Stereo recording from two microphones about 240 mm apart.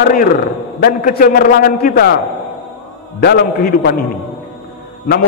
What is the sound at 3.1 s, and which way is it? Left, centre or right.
Speech, left.